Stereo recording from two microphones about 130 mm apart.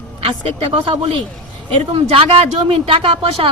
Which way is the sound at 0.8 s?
40° right (ahead or behind).